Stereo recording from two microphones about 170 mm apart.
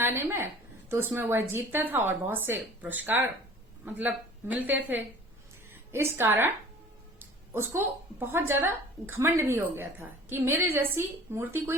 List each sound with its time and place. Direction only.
0.0 s a woman's voice: 15° right (ahead or behind)
5.9 s a woman's voice: 15° right (ahead or behind)